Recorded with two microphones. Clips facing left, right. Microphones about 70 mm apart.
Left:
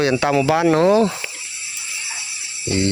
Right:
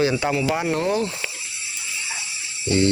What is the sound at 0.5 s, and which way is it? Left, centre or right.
Speech, left.